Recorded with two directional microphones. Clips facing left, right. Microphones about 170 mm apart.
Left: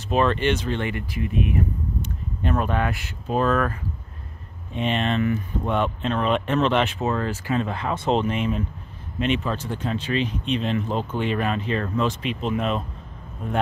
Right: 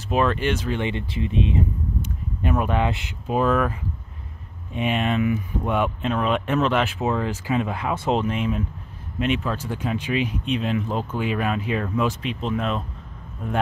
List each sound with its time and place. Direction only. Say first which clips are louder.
0.1 s speech: left 1 dB; 5° right (ahead or behind)
0.7 s speech: right 1 dB; 20° right (ahead or behind)
2.0 s speech: right 1 dB; 10° right (ahead or behind)
4.8 s speech: right 1 dB; 10° right (ahead or behind)